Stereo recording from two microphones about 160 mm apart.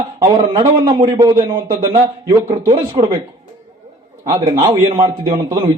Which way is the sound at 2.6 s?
35° right (ahead or behind).